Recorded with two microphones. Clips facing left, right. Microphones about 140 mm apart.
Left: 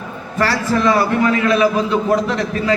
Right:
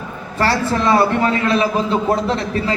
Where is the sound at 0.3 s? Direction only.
30° right (ahead or behind).